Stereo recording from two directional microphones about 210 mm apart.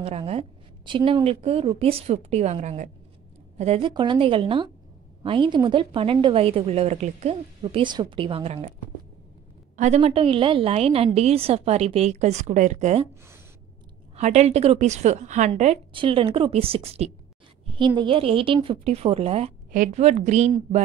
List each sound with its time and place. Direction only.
0.0 s a woman's voice: 30° right (ahead or behind)
9.8 s a woman's voice: 30° right (ahead or behind)
14.1 s a woman's voice: 30° right (ahead or behind)